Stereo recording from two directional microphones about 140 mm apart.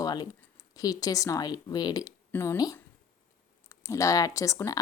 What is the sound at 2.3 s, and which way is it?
Speech, 15° left (ahead or behind).